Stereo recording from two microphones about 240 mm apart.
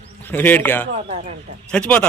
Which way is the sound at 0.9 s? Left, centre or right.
Right.